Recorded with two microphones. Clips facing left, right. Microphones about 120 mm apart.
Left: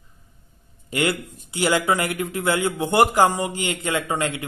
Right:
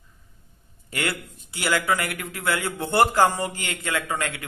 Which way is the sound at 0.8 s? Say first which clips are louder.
Left 6 dB; 20° left (ahead or behind).